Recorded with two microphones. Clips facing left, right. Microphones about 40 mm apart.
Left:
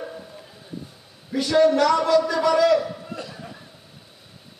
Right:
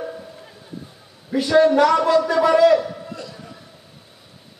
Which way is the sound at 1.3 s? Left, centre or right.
Centre.